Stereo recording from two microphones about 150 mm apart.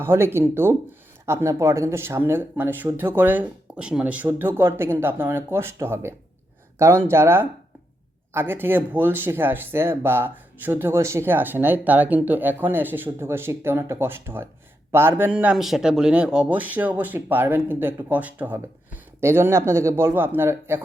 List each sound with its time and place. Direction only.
0.0 s speech: 15° right (ahead or behind)